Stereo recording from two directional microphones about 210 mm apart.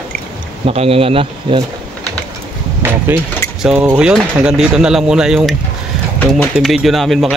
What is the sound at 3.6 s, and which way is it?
Speech, 5° right (ahead or behind).